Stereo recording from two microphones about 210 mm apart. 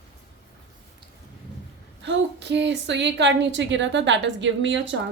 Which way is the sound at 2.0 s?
55° right (ahead or behind).